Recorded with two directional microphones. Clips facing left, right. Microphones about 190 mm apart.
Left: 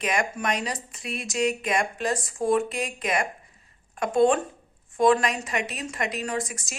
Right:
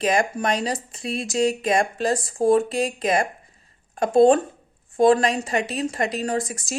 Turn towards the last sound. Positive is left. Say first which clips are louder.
# right 5 dB
turn(degrees=-35)  # may be behind; listen again after turning